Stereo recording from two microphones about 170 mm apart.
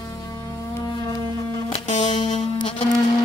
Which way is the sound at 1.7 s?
45° left (ahead or behind).